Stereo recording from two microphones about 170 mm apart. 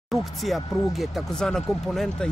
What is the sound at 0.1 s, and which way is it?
Speech, centre (ahead or behind).